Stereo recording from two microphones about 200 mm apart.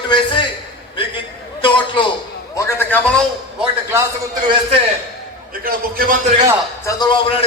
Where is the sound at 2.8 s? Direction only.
10° left (ahead or behind).